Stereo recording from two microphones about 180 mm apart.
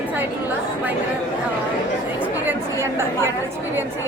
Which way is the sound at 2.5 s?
15° right (ahead or behind).